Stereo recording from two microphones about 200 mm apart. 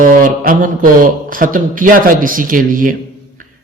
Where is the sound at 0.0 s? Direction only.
45° right (ahead or behind).